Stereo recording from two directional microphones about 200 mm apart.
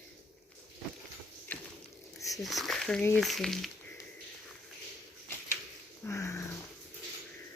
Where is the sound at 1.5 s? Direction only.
10° left (ahead or behind).